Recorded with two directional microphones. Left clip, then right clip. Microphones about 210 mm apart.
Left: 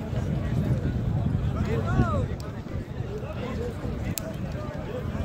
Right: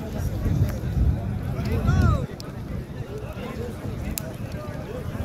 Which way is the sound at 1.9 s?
40° left (ahead or behind).